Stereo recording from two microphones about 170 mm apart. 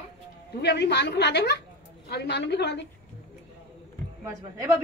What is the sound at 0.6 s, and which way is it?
A woman's voice, 80° left.